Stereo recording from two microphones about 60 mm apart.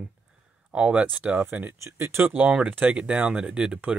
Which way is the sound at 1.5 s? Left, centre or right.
Right.